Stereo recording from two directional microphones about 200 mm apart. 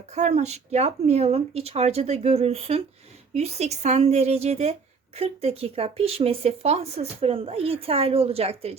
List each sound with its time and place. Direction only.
0.1 s speech: 35° right (ahead or behind)